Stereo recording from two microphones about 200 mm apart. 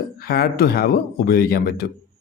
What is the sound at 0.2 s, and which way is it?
A man's voice, 50° left (ahead or behind).